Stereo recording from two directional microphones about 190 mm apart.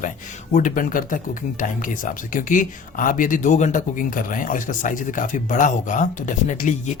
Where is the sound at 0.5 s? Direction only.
45° left (ahead or behind).